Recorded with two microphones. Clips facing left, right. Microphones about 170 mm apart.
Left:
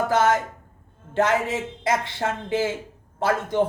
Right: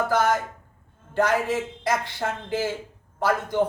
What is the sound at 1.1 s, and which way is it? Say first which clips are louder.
Speech: left 1 dB; 25° left (ahead or behind).